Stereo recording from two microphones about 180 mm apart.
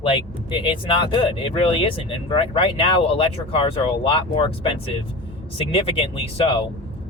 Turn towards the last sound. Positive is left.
turn(degrees=30)  # may be behind; listen again after turning